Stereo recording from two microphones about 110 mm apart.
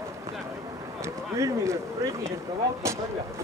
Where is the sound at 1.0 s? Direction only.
25° right (ahead or behind).